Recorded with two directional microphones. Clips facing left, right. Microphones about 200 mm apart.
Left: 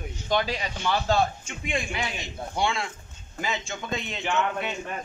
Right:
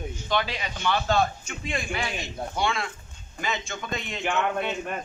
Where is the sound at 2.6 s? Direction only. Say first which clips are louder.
Left 1 dB; 25° left (ahead or behind).